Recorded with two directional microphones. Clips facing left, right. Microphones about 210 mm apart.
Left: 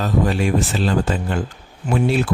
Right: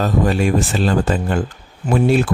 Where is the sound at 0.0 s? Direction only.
45° right (ahead or behind).